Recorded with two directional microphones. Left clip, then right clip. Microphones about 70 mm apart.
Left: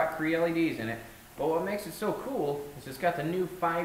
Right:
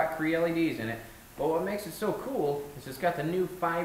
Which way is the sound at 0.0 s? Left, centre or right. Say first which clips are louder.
Even; centre.